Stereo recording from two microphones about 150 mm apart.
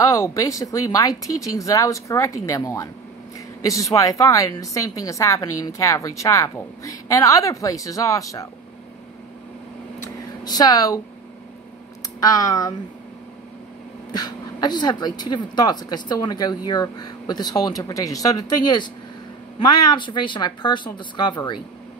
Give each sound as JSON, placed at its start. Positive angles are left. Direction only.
{"t": 0.0, "sound": "a woman's voice", "side_deg": 20}
{"t": 10.0, "sound": "a sound", "side_deg": 25}
{"t": 12.2, "sound": "a woman's voice", "side_deg": 25}
{"t": 14.1, "sound": "a woman's voice", "side_deg": 25}